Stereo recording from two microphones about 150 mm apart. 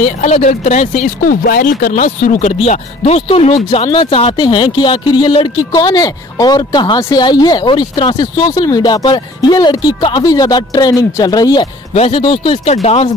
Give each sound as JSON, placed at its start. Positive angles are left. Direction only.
{"t": 0.0, "sound": "speech", "side_deg": 55}
{"t": 11.9, "sound": "speech", "side_deg": 40}
{"t": 12.7, "sound": "speech", "side_deg": 45}